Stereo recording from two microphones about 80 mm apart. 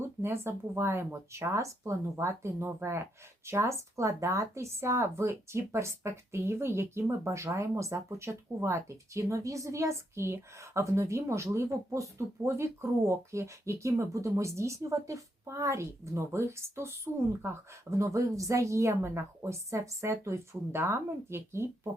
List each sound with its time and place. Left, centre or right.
0.2 s speech: right